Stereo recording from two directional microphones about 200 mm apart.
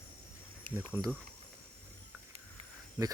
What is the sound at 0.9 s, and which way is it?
Speech, 15° right (ahead or behind).